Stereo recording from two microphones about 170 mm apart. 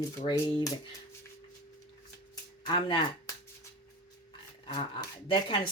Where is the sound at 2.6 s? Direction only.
25° left (ahead or behind).